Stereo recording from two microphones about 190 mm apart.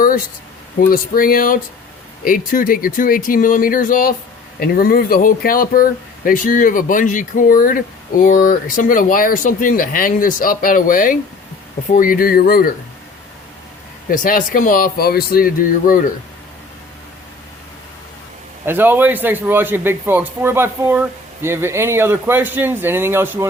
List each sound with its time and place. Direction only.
0.8 s speech: 50° left (ahead or behind)
14.1 s speech: 45° left (ahead or behind)
18.6 s a man's voice: 10° right (ahead or behind)